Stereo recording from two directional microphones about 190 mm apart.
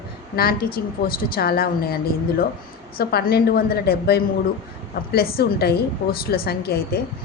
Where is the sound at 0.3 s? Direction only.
55° left (ahead or behind).